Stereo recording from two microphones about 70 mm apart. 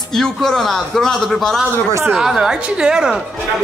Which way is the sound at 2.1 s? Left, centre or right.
Centre.